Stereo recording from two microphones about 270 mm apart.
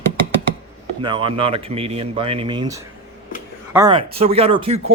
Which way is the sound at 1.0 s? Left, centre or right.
Centre.